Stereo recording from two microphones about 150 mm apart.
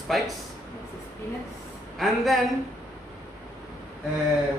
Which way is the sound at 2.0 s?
Centre (ahead or behind).